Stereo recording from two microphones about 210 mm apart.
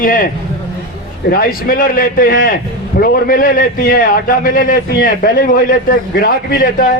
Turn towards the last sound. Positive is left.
turn(degrees=40)  # may be behind; listen again after turning